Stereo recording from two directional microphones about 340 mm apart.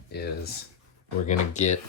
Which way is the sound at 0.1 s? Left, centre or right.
Left.